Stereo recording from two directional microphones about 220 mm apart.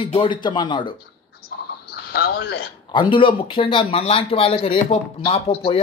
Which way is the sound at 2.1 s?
45° left (ahead or behind).